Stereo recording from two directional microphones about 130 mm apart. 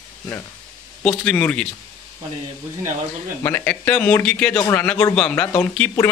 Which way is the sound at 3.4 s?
15° left (ahead or behind).